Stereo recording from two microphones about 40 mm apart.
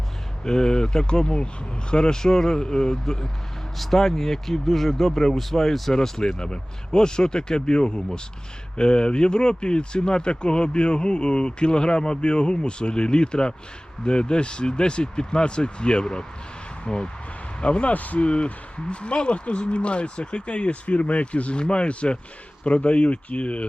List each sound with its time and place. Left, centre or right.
0.4 s speech: centre; by 18.2 s left
18.2 s speech: left